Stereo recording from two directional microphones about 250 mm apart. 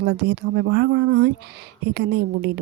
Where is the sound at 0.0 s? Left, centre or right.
Right.